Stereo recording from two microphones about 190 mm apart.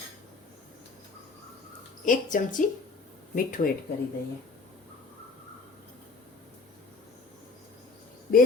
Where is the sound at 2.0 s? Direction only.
45° left (ahead or behind).